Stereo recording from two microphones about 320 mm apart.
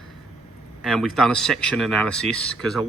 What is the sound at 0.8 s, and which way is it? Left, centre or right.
Speech, centre.